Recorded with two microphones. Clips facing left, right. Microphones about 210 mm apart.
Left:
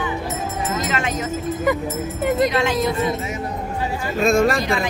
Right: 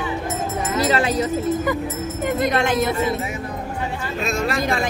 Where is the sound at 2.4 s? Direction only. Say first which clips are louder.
Even; 50° right (ahead or behind).